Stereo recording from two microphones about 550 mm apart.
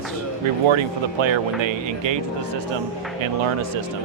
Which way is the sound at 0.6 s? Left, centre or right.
Right.